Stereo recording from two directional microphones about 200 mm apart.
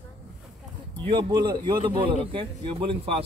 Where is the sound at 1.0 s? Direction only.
25° right (ahead or behind).